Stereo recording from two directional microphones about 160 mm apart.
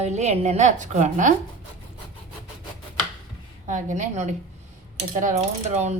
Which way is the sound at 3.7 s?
50° right (ahead or behind).